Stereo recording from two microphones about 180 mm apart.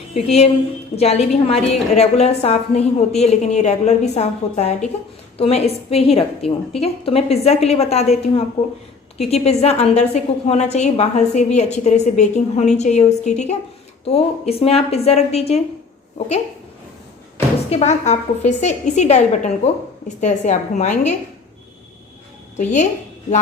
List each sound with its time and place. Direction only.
0.1 s a woman's voice: 35° left (ahead or behind)
6.4 s a woman's voice: centre (ahead or behind)
6.7 s a woman's voice: 35° left (ahead or behind)
17.7 s a woman's voice: 40° left (ahead or behind)
22.5 s a woman's voice: 40° left (ahead or behind)